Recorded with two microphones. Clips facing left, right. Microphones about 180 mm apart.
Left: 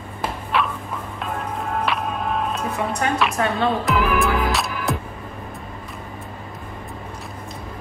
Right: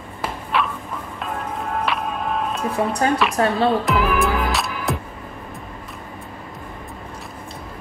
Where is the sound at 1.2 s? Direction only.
Centre (ahead or behind).